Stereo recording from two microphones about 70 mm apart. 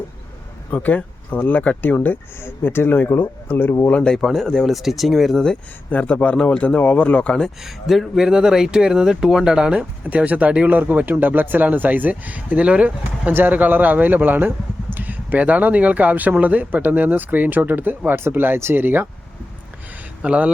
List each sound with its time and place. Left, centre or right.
0.7 s speech: left
3.8 s speech: centre
4.1 s speech: centre
5.9 s speech: left
7.6 s speech: centre
10.0 s speech: right
20.2 s speech: centre